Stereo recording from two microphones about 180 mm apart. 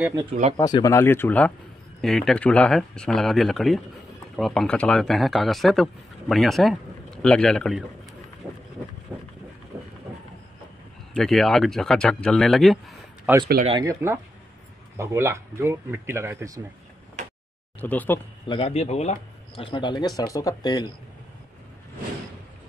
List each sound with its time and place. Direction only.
0.1 s speech: 25° right (ahead or behind)
0.6 s speech: 20° left (ahead or behind); by 7.8 s 5° left (ahead or behind)
8.4 s a sound: centre (ahead or behind)
9.7 s train: 5° right (ahead or behind)
11.1 s speech: centre (ahead or behind)
13.7 s speech: 20° right (ahead or behind)
17.8 s speech: 10° left (ahead or behind)
18.5 s speech: 35° left (ahead or behind)